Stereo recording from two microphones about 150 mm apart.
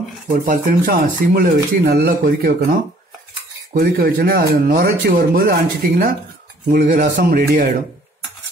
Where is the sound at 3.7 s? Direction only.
90° right.